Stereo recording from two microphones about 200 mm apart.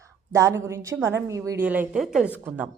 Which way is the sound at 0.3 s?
15° right (ahead or behind).